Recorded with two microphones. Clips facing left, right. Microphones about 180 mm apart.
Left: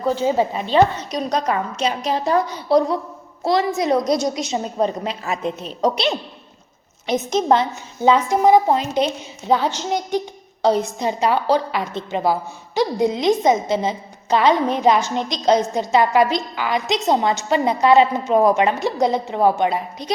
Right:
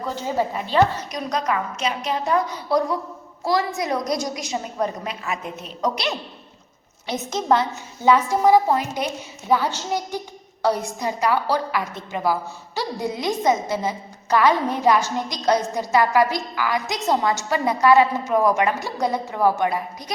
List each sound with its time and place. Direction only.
0.3 s a woman's voice: 20° left (ahead or behind)